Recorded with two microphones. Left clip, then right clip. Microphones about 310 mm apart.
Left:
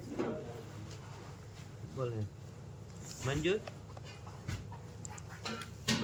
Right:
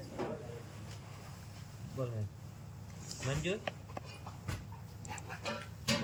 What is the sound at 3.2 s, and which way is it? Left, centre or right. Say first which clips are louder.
Speech: left 4 dB; centre.